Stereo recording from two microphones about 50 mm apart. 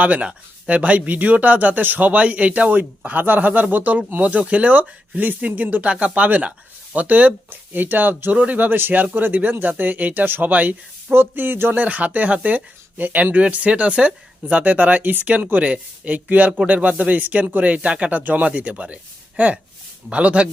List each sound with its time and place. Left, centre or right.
0.0 s speech: right
4.2 s speech: right
11.1 s speech: right
11.8 s speech: right
15.6 s speech: right
18.2 s speech: right
18.4 s speech: right
20.1 s speech: right